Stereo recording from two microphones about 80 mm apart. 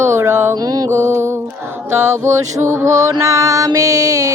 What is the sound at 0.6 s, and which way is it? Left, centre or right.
Music, right.